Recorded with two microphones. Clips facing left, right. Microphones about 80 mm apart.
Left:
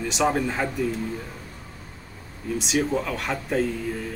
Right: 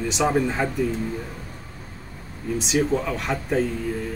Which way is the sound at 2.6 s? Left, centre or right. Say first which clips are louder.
Right 2 dB; centre.